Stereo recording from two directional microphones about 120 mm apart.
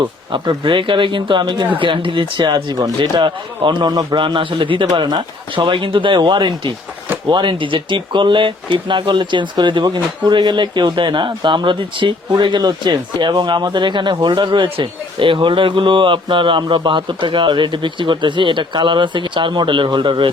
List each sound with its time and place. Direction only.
0.0 s speech: 40° right (ahead or behind)